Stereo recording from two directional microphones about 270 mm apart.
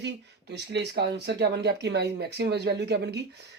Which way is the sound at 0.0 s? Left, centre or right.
Right.